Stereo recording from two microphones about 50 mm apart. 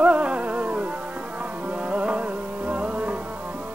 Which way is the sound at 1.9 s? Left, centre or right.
Right.